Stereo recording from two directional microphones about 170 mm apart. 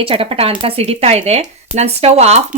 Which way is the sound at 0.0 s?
35° right (ahead or behind).